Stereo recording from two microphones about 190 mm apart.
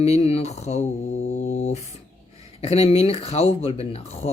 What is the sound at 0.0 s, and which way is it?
Mantra, 35° left (ahead or behind).